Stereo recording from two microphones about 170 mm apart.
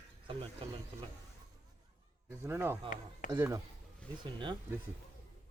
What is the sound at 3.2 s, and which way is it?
Speech, 50° left (ahead or behind).